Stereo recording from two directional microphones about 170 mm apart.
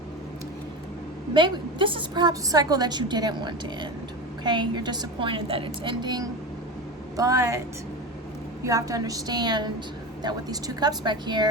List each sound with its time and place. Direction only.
1.3 s a woman's voice: 30° right (ahead or behind)
8.6 s a woman's voice: 20° right (ahead or behind)